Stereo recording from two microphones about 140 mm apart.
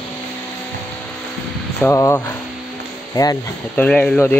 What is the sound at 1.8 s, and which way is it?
Speech, 20° left (ahead or behind).